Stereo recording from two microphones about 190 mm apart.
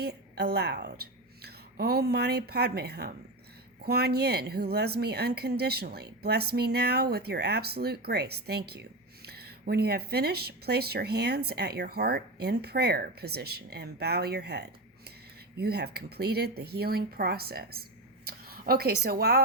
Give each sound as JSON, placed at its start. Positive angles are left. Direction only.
{"t": 0.0, "sound": "a woman's voice", "side_deg": -55}
{"t": 18.3, "sound": "a sound", "side_deg": -50}
{"t": 19.0, "sound": "a woman's voice", "side_deg": -55}